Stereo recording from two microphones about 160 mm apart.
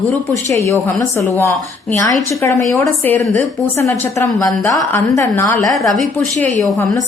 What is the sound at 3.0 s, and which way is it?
A woman's voice, 10° left (ahead or behind).